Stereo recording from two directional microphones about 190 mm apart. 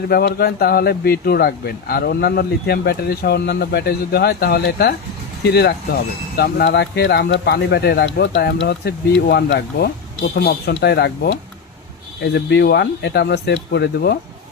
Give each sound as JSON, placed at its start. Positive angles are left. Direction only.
{"t": 0.1, "sound": "speech", "side_deg": 55}